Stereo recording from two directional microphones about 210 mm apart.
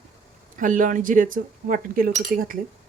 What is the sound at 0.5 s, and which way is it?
Speech, 40° right (ahead or behind).